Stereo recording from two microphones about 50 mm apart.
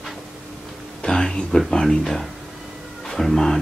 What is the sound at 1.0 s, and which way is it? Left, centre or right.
Speech, centre.